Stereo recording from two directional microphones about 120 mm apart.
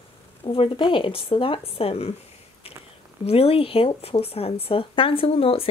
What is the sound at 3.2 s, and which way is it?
Speech, 55° left (ahead or behind).